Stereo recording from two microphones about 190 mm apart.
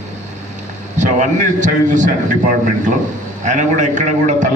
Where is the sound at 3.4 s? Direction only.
40° right (ahead or behind).